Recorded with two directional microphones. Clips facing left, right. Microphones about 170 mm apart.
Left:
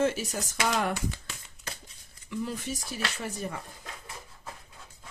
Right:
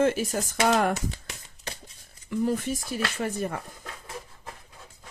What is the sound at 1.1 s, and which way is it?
Shuffling cards, 20° right (ahead or behind).